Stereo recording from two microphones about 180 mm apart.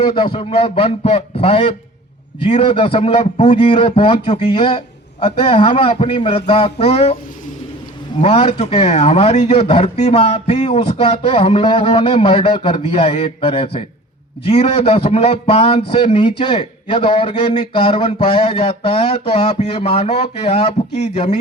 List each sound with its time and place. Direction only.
0.0 s a man's voice: 25° left (ahead or behind)
8.2 s a man's voice: 35° left (ahead or behind)